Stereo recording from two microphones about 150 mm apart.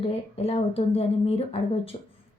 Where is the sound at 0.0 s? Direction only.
40° left (ahead or behind).